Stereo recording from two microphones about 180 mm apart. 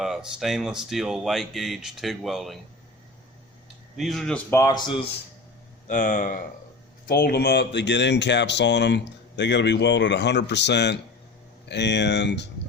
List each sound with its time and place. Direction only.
0.0 s speech: centre (ahead or behind)
3.9 s speech: centre (ahead or behind)
4.5 s speech: 20° left (ahead or behind)
5.9 s speech: 45° left (ahead or behind); by 12.5 s 70° left (ahead or behind)